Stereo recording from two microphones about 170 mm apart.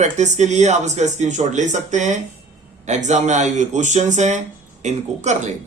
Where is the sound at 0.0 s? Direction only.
45° right (ahead or behind).